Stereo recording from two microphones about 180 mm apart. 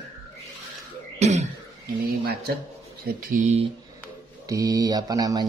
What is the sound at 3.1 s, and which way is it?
Speech, 55° right (ahead or behind).